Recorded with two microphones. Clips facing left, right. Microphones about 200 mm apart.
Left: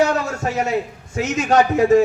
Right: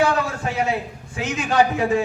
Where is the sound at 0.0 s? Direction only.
40° left (ahead or behind).